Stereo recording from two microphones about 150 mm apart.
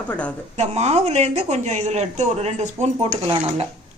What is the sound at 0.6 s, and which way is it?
Speech, 45° right (ahead or behind).